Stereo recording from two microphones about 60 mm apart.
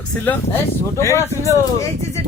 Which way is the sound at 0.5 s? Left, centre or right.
Left.